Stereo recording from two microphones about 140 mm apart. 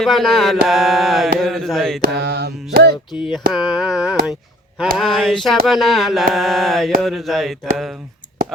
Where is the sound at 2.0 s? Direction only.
90° right.